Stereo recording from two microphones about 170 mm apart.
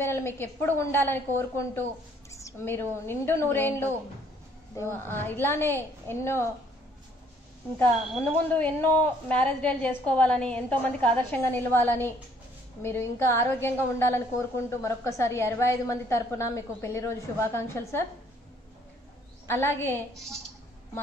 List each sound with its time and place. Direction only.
0.0 s a woman's voice: 15° left (ahead or behind)
7.8 s speech: 10° left (ahead or behind)
19.4 s speech: 15° left (ahead or behind)